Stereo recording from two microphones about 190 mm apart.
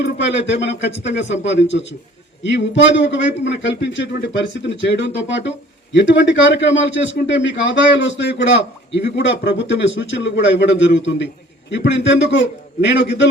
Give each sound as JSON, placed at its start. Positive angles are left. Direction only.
{"t": 0.0, "sound": "speech", "side_deg": 70}